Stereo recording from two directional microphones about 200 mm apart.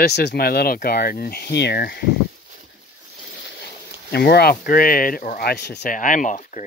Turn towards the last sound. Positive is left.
turn(degrees=40)  # may be behind; listen again after turning